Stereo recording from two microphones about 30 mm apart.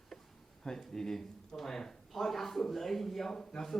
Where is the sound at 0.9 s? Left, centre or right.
Centre.